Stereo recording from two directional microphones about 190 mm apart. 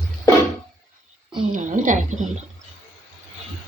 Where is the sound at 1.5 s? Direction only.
45° right (ahead or behind).